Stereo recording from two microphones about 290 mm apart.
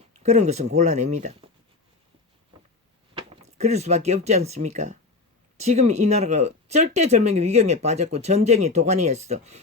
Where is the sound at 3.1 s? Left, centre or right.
Right.